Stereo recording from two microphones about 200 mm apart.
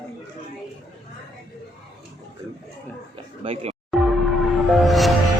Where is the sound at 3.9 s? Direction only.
Centre (ahead or behind).